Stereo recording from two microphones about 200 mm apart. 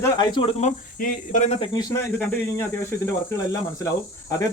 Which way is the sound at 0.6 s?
40° left (ahead or behind).